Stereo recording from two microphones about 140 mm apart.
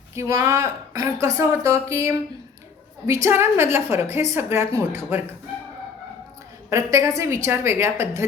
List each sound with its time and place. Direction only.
0.1 s a woman's voice: 20° right (ahead or behind)
6.7 s a woman's voice: 20° right (ahead or behind)